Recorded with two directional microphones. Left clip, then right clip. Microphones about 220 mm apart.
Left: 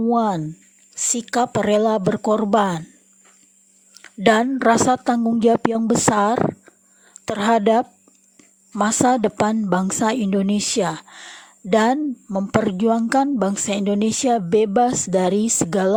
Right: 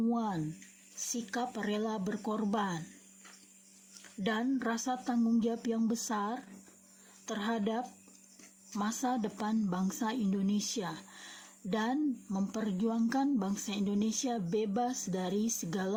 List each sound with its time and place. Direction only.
0.0 s a woman's voice: 45° left (ahead or behind)
4.0 s a woman's voice: 45° left (ahead or behind)